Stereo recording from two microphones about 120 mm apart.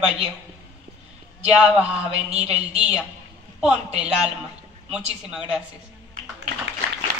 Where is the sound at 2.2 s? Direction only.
60° right (ahead or behind).